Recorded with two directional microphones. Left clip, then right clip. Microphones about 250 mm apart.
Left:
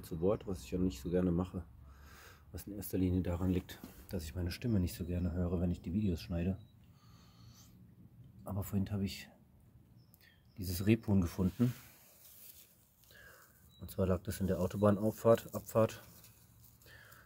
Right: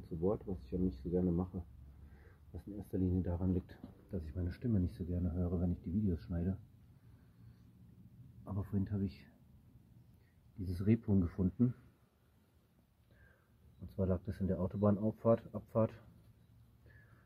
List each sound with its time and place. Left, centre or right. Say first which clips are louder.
0.2 s speech: left 3 dB; centre
8.5 s speech: left 2 dB; centre
10.6 s speech: left 3 dB; centre
13.8 s speech: left 3 dB; centre